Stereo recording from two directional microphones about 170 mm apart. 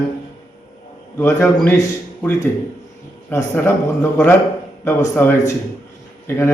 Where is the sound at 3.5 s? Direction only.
10° left (ahead or behind).